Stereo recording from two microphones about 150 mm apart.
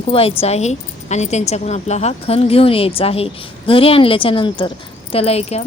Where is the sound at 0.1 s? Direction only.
40° left (ahead or behind).